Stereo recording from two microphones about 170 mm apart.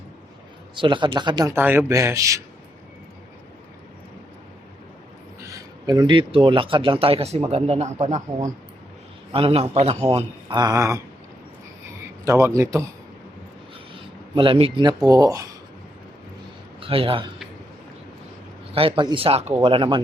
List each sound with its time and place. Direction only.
0.8 s speech: 30° right (ahead or behind)
1.5 s a man's voice: 10° right (ahead or behind)
5.4 s speech: 20° right (ahead or behind); by 8.2 s 45° right (ahead or behind)
9.3 s speech: 35° right (ahead or behind); by 11.0 s 20° right (ahead or behind)
12.2 s a man's voice: 15° right (ahead or behind)
14.3 s speech: 30° right (ahead or behind)
16.8 s speech: 30° right (ahead or behind)
18.7 s speech: 35° right (ahead or behind)